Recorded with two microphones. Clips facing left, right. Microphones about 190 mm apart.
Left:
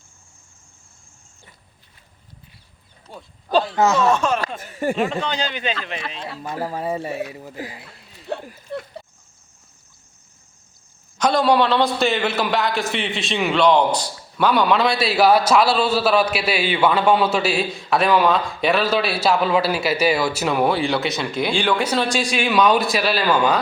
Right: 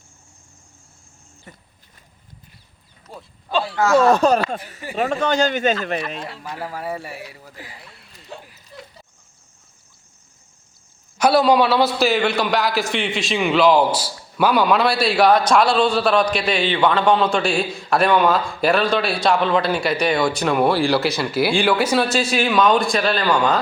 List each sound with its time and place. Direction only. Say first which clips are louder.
1.5 s wild animals: right 11 dB; 50° right (ahead or behind)
3.1 s a man's voice: right 1 dB; centre (ahead or behind)
3.8 s speech: right 4 dB; 20° left (ahead or behind)
4.1 s a man's voice: right 4 dB; 35° right (ahead or behind)
6.6 s speech: left 4 dB; 30° left (ahead or behind)
8.4 s a sound: left 11 dB; 55° left (ahead or behind)
11.2 s a man's voice: right 2 dB; 5° right (ahead or behind)